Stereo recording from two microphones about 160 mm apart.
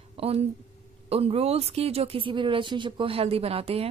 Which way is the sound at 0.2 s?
40° right (ahead or behind).